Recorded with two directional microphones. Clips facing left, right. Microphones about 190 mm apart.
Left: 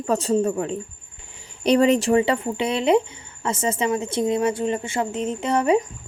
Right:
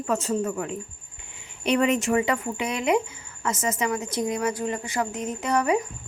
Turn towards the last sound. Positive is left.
turn(degrees=25)  # may be behind; listen again after turning